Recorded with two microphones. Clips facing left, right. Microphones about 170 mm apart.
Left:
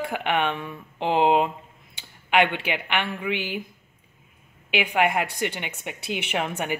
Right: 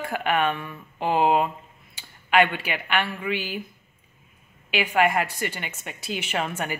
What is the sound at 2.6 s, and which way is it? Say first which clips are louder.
Speech: even; 15° left (ahead or behind).